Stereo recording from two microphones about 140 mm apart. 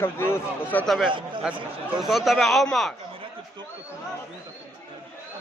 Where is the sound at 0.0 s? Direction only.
15° left (ahead or behind).